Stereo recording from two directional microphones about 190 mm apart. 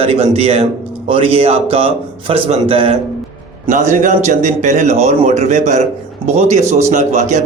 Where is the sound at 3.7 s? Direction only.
40° right (ahead or behind).